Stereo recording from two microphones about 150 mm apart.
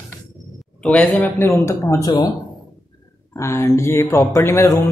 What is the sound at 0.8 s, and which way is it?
A man's voice, 5° left (ahead or behind).